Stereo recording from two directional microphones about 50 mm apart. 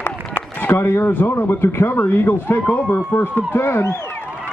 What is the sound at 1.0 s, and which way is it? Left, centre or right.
Speech, left.